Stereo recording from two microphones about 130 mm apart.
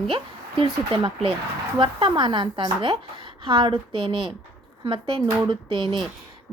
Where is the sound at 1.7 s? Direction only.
40° right (ahead or behind).